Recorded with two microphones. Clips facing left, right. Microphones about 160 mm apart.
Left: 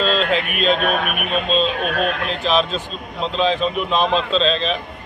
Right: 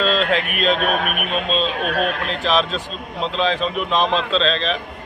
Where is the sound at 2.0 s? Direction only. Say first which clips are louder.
Even; centre (ahead or behind).